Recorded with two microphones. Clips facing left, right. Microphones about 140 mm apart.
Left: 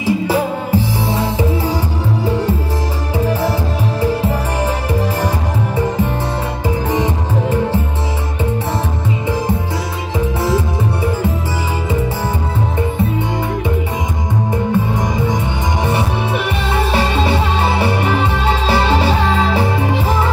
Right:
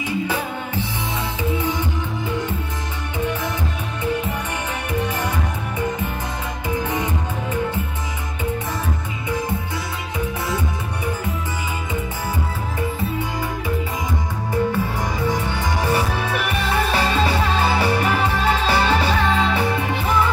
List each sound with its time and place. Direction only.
0.0 s music: 35° left (ahead or behind)
2.2 s music: 35° left (ahead or behind)
4.0 s music: 35° left (ahead or behind)
6.9 s music: 35° left (ahead or behind)
10.1 s music: 30° left (ahead or behind)
14.5 s music: 20° left (ahead or behind)